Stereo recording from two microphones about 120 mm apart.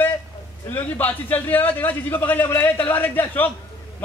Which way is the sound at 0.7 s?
15° left (ahead or behind).